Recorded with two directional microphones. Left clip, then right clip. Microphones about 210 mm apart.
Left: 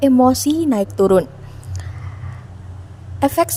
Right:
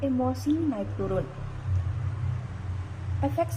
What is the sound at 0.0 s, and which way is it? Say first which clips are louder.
Speech: left 15 dB; 55° left (ahead or behind).